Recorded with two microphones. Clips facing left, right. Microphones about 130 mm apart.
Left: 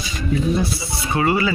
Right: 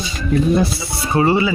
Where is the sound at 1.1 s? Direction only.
30° right (ahead or behind).